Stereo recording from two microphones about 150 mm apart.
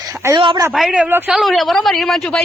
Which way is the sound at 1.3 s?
Centre (ahead or behind).